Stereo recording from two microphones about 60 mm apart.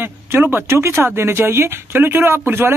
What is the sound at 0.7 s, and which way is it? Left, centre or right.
Speech, right.